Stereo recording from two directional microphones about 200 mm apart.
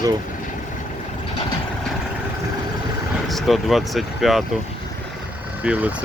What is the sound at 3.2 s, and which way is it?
Speech, centre (ahead or behind).